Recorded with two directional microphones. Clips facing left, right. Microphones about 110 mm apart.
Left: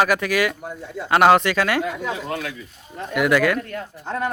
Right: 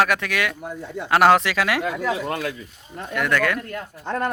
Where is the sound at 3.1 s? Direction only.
10° left (ahead or behind).